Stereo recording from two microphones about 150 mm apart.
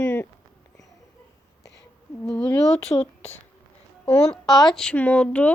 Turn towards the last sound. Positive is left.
turn(degrees=10)  # may be behind; listen again after turning